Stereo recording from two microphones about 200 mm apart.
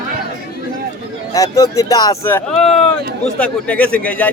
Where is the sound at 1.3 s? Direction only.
15° left (ahead or behind).